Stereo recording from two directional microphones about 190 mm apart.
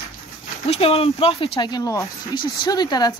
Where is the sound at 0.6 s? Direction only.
30° left (ahead or behind).